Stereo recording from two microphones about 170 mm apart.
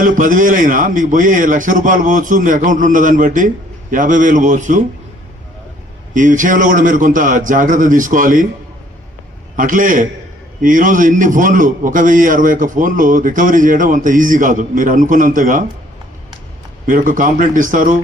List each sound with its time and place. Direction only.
0.0 s a man's voice: 50° right (ahead or behind)
6.1 s a man's voice: 50° right (ahead or behind)
9.6 s a man's voice: 50° right (ahead or behind)
16.8 s a man's voice: 50° right (ahead or behind)